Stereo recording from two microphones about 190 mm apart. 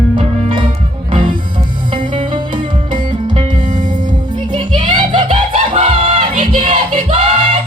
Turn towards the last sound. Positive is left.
turn(degrees=-30)  # may be behind; listen again after turning